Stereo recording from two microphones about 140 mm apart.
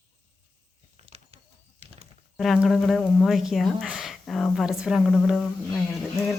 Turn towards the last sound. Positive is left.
turn(degrees=0)  # may be behind; listen again after turning